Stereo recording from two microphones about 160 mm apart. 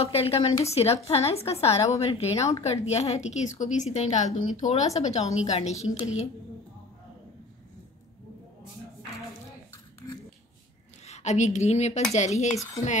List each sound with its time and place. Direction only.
0.0 s a woman's voice: 40° left (ahead or behind)
11.1 s a sound: 45° left (ahead or behind)
12.1 s a woman's voice: 45° left (ahead or behind)